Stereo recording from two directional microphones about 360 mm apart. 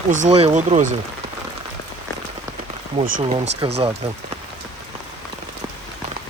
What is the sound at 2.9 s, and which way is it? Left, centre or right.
Speech, centre.